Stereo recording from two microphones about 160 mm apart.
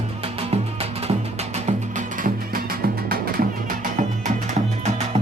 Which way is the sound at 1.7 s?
55° right (ahead or behind).